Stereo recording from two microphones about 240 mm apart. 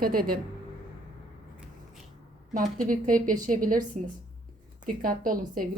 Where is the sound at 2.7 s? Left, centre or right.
Right.